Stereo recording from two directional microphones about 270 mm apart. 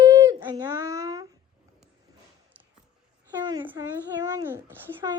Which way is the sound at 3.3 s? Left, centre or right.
Centre.